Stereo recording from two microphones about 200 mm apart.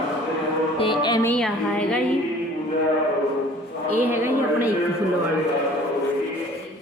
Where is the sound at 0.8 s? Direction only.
25° left (ahead or behind).